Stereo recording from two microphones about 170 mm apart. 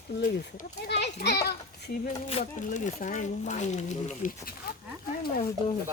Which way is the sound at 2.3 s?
40° left (ahead or behind).